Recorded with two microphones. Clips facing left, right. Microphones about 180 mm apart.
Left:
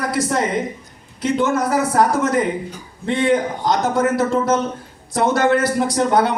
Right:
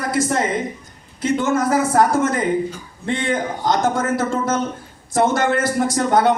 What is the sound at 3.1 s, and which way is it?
A man's voice, 50° right (ahead or behind).